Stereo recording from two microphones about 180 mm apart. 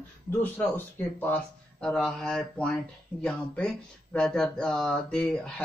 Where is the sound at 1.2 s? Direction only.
5° left (ahead or behind).